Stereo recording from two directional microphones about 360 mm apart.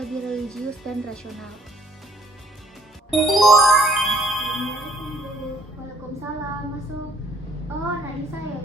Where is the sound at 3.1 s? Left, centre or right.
Centre.